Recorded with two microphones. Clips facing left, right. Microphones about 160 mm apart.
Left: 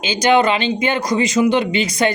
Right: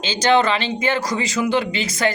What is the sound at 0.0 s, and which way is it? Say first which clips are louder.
A man's voice: left 2 dB; 10° left (ahead or behind).